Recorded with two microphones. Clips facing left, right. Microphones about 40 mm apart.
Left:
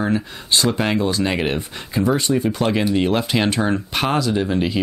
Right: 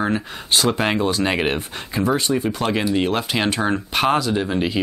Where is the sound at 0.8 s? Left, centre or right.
Centre.